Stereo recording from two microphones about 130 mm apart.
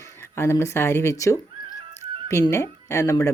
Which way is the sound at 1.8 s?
40° right (ahead or behind).